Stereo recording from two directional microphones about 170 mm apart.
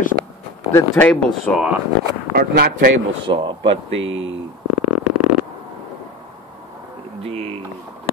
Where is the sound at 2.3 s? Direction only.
65° right (ahead or behind).